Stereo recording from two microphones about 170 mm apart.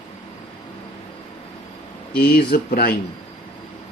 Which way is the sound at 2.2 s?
60° left (ahead or behind).